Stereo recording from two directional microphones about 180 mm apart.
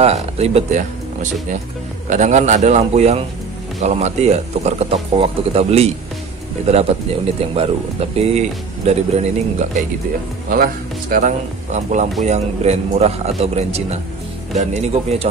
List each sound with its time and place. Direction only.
0.0 s speech: 35° right (ahead or behind)
2.0 s speech: 40° right (ahead or behind)
10.5 s speech: 50° right (ahead or behind); by 15.2 s 35° right (ahead or behind)